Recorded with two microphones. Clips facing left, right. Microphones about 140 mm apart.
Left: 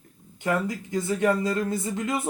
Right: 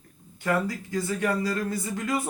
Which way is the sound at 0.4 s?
20° left (ahead or behind).